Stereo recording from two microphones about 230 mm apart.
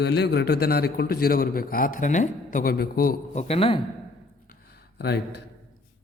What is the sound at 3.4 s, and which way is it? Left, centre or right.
Speech, left.